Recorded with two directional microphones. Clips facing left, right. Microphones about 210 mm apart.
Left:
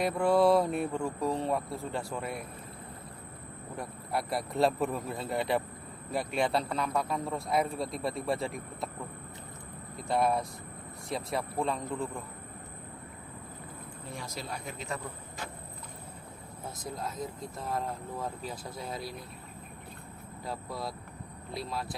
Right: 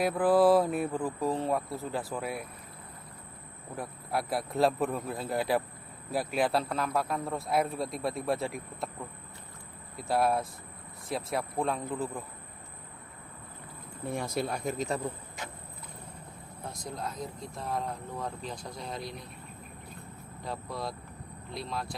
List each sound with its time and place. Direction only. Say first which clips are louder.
0.0 s speech: right 1 dB; centre (ahead or behind)
3.8 s speech: right 1 dB; centre (ahead or behind)
10.0 s speech: right 1 dB; centre (ahead or behind)
14.0 s speech: right 10 dB; 55° right (ahead or behind); by 15.0 s 35° right (ahead or behind)
16.6 s speech: even; centre (ahead or behind)
20.4 s speech: right 1 dB; centre (ahead or behind)